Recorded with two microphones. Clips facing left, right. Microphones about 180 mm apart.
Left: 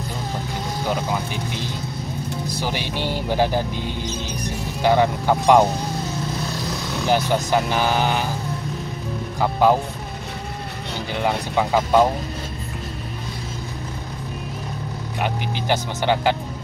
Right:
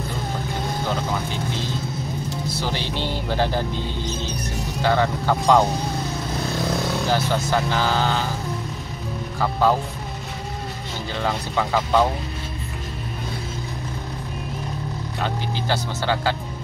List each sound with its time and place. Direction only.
2.5 s music: 15° left (ahead or behind)
4.8 s speech: 15° left (ahead or behind)
7.1 s speech: 15° left (ahead or behind)
9.4 s speech: 15° left (ahead or behind)
11.1 s speech: 15° left (ahead or behind)
15.1 s speech: 15° left (ahead or behind)